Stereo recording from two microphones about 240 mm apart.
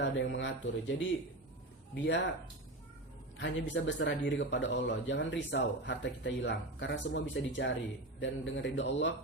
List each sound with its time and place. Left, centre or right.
0.0 s speech: left
2.0 s speech: left
3.3 s speech: left